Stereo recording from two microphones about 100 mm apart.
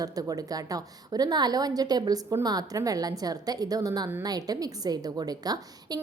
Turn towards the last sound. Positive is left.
turn(degrees=-40)  # may be behind; listen again after turning